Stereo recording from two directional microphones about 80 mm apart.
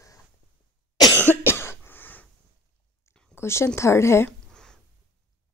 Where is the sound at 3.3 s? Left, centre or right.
Left.